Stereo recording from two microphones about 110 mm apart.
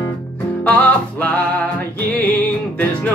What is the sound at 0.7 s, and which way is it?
Music, 15° left (ahead or behind).